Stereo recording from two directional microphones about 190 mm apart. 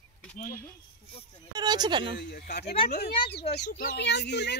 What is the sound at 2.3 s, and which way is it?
Speech, 60° left (ahead or behind).